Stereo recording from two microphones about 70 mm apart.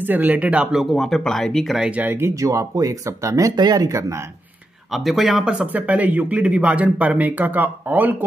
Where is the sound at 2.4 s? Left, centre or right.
Right.